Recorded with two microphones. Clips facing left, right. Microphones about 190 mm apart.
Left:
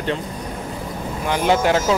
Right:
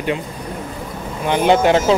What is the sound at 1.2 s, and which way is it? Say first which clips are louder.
Speech: right 4 dB; 20° right (ahead or behind).